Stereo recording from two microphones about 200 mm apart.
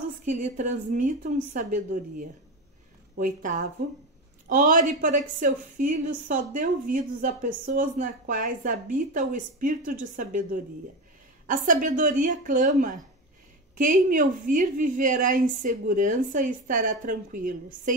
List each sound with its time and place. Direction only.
0.2 s a woman's voice: 35° right (ahead or behind)